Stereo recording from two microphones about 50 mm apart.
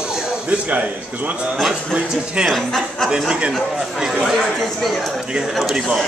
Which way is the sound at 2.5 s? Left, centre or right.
Centre.